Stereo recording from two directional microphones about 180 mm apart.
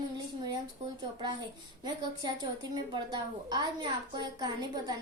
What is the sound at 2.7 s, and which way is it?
A woman's voice, 25° right (ahead or behind).